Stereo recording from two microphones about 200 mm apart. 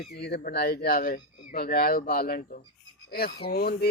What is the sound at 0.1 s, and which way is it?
Speech, 55° left (ahead or behind).